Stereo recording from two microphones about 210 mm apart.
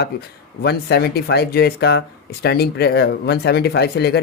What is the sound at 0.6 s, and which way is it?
Speech, 50° left (ahead or behind).